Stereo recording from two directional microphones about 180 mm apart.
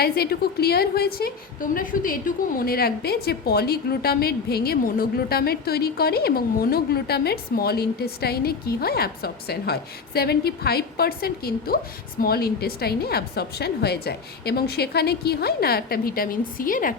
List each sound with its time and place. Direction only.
0.0 s a woman's voice: 60° left (ahead or behind)